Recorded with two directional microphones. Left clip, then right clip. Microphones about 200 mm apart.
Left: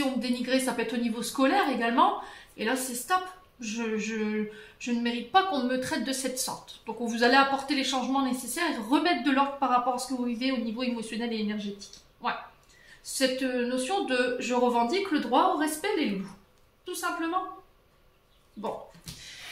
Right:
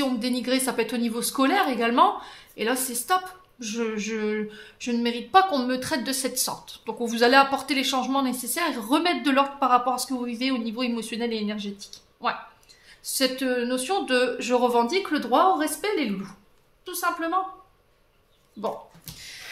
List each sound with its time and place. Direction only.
0.0 s a man's voice: 50° right (ahead or behind)